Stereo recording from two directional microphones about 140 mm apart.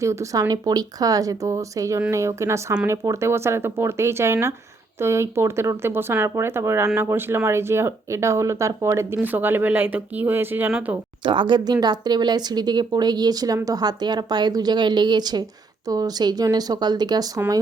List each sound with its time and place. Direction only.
0.0 s speech: 20° right (ahead or behind); by 10.9 s 5° right (ahead or behind)
11.2 s speech: 35° right (ahead or behind)